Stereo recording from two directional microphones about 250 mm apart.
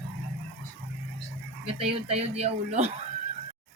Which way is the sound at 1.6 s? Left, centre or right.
Right.